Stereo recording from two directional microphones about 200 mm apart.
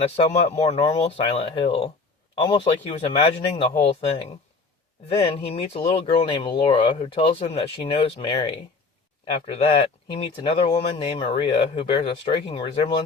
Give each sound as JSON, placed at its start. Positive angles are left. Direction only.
{"t": 0.0, "sound": "speech", "side_deg": 35}